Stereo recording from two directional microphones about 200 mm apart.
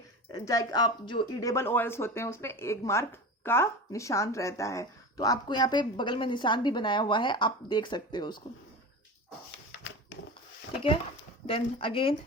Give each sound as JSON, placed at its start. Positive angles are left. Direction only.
{"t": 0.3, "sound": "speech", "side_deg": 20}
{"t": 11.4, "sound": "speech", "side_deg": 25}